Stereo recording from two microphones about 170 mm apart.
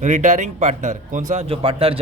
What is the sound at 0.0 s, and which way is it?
A man's voice, 45° right (ahead or behind).